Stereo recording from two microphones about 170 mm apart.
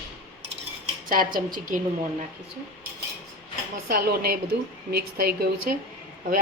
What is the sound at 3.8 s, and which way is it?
A woman's voice, 65° right (ahead or behind).